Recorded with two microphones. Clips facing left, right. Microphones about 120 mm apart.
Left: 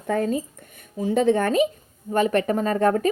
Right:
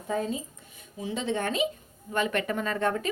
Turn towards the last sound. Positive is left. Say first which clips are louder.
# left 8 dB
turn(degrees=40)  # may be behind; listen again after turning